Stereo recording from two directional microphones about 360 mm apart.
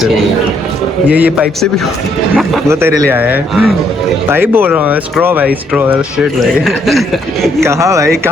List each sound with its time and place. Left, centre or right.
1.0 s speech: centre